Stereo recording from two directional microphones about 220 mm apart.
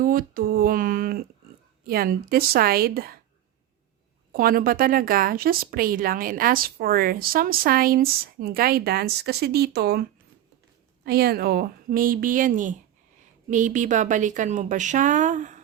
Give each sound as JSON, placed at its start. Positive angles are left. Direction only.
{"t": 0.0, "sound": "a woman's voice", "side_deg": -40}
{"t": 4.3, "sound": "a woman's voice", "side_deg": -40}